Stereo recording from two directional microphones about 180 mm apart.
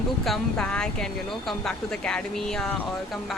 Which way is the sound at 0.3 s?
5° left (ahead or behind).